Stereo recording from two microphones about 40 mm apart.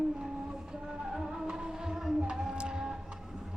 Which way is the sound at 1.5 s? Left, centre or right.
Centre.